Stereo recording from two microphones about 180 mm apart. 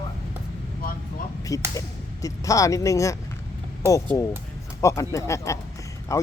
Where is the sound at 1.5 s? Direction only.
20° left (ahead or behind).